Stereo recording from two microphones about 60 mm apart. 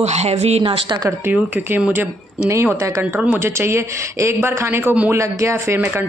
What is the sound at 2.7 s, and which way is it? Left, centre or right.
Speech, right.